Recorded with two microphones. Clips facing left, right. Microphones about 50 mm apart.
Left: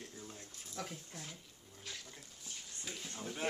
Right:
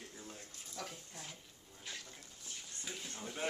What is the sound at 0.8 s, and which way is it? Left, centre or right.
Speech, centre.